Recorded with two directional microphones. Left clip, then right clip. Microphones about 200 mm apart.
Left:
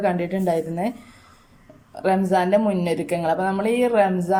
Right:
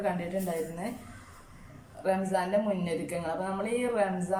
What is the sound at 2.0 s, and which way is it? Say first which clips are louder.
A woman's voice: left 9 dB; 45° left (ahead or behind).